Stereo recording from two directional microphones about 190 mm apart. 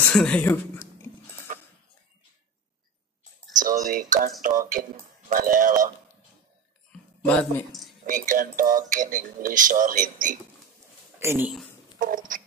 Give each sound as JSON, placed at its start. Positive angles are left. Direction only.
{"t": 0.0, "sound": "a woman's voice", "side_deg": 5}
{"t": 3.5, "sound": "speech", "side_deg": -45}
{"t": 6.9, "sound": "speech", "side_deg": 5}
{"t": 8.1, "sound": "speech", "side_deg": -45}
{"t": 11.1, "sound": "speech", "side_deg": -10}